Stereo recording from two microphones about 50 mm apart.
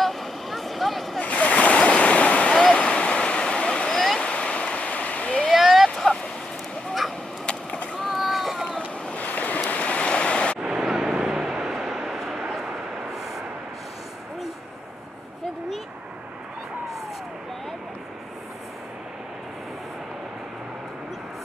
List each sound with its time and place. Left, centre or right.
0.0 s vehicle: centre
1.2 s waves: left
4.2 s a sound: centre
5.5 s vehicle: centre
7.4 s skateboard: left
8.0 s boat: centre
8.7 s waves: left
10.6 s vehicle: centre
13.1 s a sound: centre